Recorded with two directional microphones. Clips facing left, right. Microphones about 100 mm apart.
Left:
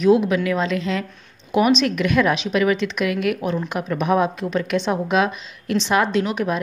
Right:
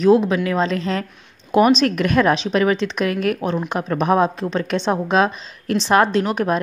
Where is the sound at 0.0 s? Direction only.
35° right (ahead or behind).